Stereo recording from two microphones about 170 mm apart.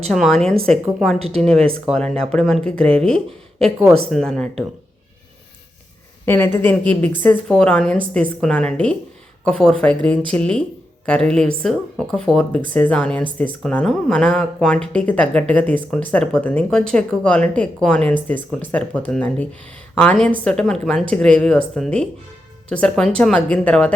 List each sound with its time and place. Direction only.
0.1 s speech: centre (ahead or behind)
3.6 s speech: 5° right (ahead or behind)
6.2 s a woman's voice: 15° left (ahead or behind)